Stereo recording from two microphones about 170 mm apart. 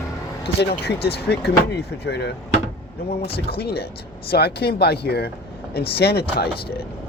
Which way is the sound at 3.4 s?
70° left (ahead or behind).